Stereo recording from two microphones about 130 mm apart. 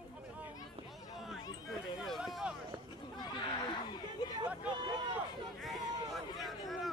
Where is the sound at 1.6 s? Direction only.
Centre (ahead or behind).